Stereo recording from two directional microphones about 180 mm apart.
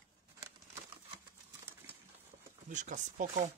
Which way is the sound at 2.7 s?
45° right (ahead or behind).